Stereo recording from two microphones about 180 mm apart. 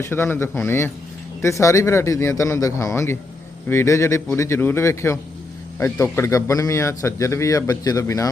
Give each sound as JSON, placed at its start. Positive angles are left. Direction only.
{"t": 0.0, "sound": "a man's voice", "side_deg": 15}